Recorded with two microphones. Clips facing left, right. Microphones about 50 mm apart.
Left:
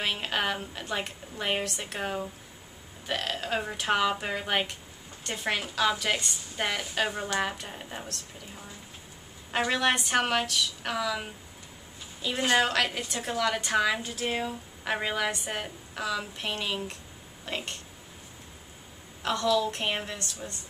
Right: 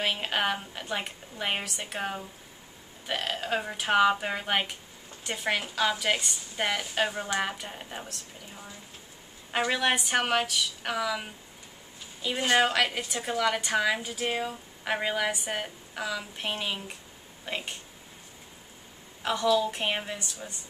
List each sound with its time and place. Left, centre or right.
0.0 s a woman's voice: centre
9.5 s a woman's voice: centre
19.2 s a woman's voice: centre